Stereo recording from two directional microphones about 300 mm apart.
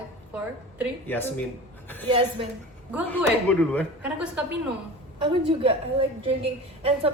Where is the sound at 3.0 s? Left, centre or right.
Centre.